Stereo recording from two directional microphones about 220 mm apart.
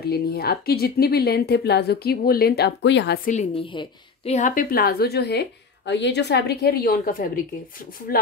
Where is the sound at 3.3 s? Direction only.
30° left (ahead or behind).